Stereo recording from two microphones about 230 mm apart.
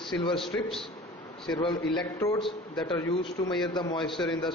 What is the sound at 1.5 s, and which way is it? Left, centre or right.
A man's voice, left.